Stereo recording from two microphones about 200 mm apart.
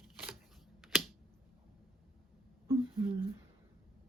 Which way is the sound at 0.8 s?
Centre (ahead or behind).